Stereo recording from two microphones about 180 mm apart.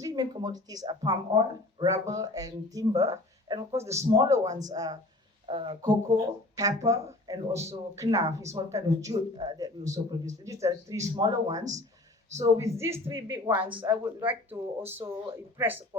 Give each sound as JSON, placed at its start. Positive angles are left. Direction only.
{"t": 0.0, "sound": "speech", "side_deg": -20}